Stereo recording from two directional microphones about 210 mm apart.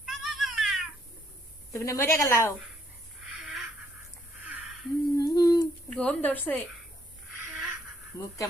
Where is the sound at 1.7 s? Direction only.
15° left (ahead or behind).